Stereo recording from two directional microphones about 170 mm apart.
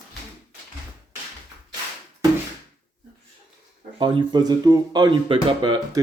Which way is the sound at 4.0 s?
25° right (ahead or behind).